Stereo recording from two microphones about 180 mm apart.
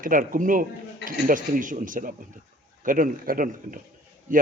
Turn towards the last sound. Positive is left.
turn(degrees=-50)  # may be behind; listen again after turning